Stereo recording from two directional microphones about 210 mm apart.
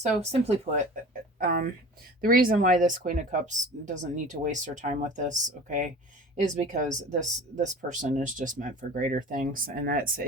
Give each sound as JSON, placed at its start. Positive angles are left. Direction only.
{"t": 0.3, "sound": "speech", "side_deg": -30}
{"t": 1.4, "sound": "speech", "side_deg": -45}